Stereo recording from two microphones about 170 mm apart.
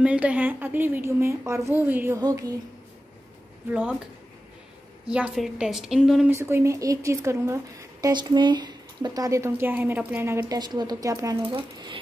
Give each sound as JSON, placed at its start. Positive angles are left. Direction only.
{"t": 0.0, "sound": "a woman's voice", "side_deg": -5}
{"t": 2.1, "sound": "speech", "side_deg": -20}
{"t": 5.0, "sound": "a woman's voice", "side_deg": -5}
{"t": 6.3, "sound": "a woman's voice", "side_deg": -15}